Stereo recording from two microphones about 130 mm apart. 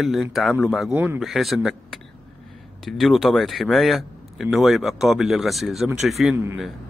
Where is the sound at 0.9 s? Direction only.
15° right (ahead or behind).